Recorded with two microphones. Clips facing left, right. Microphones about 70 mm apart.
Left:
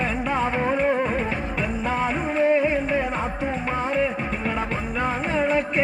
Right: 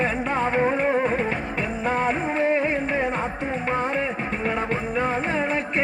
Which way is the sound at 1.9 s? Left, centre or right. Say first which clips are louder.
Right 3 dB; right.